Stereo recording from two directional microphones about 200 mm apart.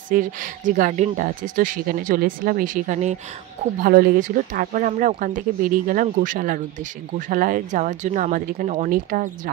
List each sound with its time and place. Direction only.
0.1 s speech: 40° right (ahead or behind)